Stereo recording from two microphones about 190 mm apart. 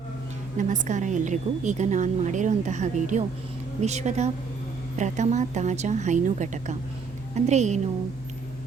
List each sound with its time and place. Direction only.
0.5 s a woman's voice: 40° right (ahead or behind)